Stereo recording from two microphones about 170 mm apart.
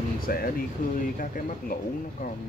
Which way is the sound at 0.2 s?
60° left (ahead or behind).